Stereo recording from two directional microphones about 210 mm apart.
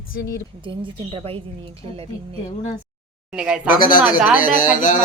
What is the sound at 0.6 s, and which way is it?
A woman's voice, 25° right (ahead or behind).